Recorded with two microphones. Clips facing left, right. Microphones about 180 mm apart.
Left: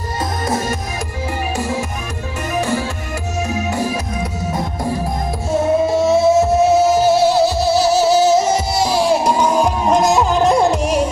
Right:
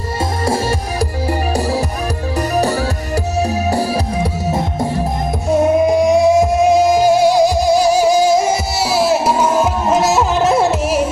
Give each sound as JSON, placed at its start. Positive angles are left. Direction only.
{"t": 0.5, "sound": "music", "side_deg": -30}
{"t": 5.9, "sound": "music", "side_deg": -15}